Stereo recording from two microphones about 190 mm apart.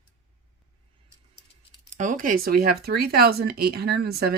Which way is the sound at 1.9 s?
45° right (ahead or behind).